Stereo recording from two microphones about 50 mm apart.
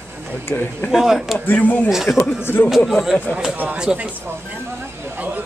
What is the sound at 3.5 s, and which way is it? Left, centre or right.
Speech, right.